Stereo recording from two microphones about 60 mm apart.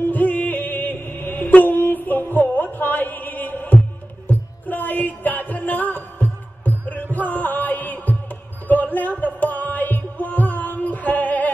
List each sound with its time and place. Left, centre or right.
0.1 s music: left
8.6 s a sound: left
9.2 s music: left